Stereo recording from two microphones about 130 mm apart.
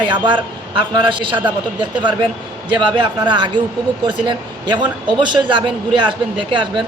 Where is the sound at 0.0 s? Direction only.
40° right (ahead or behind).